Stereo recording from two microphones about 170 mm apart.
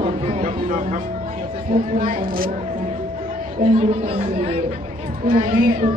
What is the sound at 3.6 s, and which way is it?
Speech, 35° right (ahead or behind).